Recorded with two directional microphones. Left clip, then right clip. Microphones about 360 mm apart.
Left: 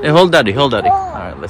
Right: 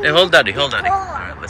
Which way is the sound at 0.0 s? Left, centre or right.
Centre.